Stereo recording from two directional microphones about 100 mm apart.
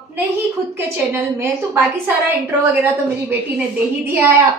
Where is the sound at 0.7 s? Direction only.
20° right (ahead or behind).